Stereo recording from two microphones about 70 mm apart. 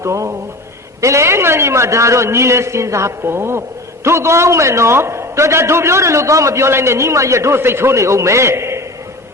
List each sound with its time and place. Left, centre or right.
0.0 s a man's voice: right